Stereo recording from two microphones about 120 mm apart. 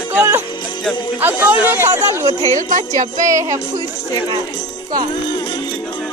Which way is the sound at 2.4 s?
90° right.